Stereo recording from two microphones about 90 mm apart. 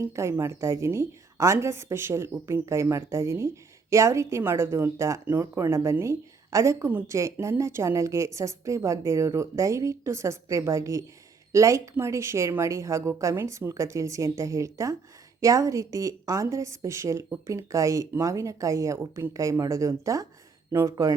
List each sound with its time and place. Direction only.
0.0 s a woman's voice: 30° right (ahead or behind)
5.2 s speech: 20° right (ahead or behind)
5.5 s a woman's voice: 35° right (ahead or behind)